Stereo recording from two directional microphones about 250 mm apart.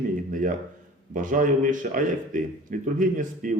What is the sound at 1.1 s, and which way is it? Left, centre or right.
Speech, right.